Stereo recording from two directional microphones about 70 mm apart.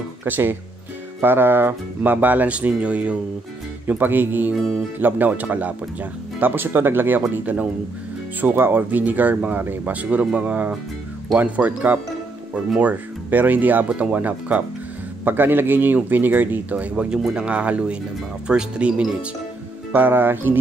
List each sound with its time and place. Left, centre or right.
0.2 s speech: right; by 19.1 s centre
19.9 s speech: right